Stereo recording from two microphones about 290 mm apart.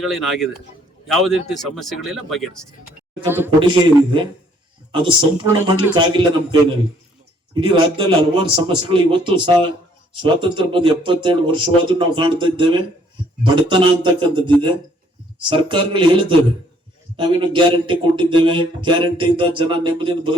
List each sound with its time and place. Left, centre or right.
0.0 s speech: centre
17.2 s speech: centre